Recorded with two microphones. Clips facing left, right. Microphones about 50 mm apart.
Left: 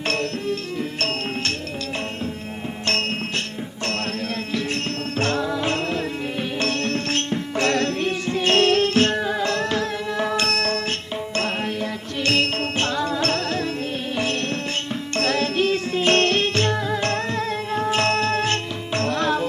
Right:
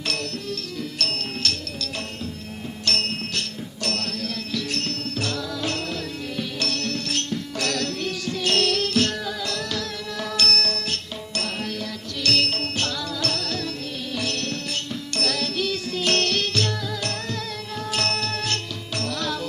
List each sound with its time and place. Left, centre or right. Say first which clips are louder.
0.1 s music: left 6 dB; left
2.8 s music: left 3 dB; left
5.2 s music: left 7 dB; left
12.2 s music: left 3 dB; left
15.1 s music: left 5 dB; left